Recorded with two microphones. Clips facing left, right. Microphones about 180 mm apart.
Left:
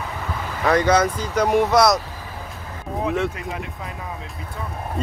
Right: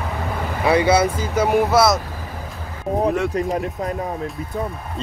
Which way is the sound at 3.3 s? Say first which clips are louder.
Right 9 dB; 40° right (ahead or behind).